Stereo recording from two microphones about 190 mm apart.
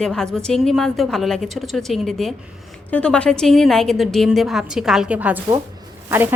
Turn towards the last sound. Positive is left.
turn(degrees=-10)  # may be behind; listen again after turning